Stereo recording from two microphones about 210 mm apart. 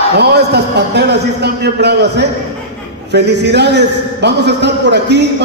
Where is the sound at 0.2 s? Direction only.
50° right (ahead or behind).